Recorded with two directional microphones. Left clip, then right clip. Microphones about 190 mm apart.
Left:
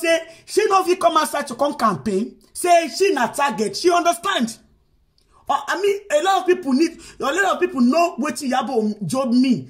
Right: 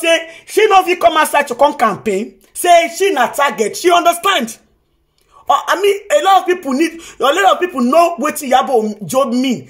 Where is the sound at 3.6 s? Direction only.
10° left (ahead or behind).